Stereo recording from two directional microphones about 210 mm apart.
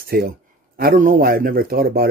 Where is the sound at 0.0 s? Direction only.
45° right (ahead or behind).